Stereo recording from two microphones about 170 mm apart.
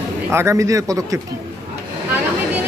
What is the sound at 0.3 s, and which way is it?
Speech, 15° right (ahead or behind).